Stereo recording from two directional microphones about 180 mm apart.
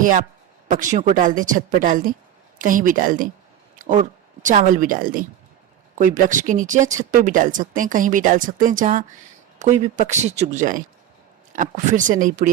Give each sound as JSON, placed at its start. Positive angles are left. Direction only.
{"t": 0.0, "sound": "speech", "side_deg": -45}
{"t": 3.8, "sound": "a sound", "side_deg": -45}
{"t": 4.4, "sound": "speech", "side_deg": -45}